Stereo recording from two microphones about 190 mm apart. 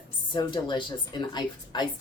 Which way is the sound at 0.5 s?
25° left (ahead or behind).